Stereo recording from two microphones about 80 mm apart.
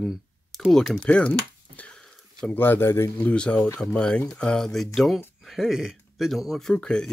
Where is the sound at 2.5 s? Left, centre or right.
Left.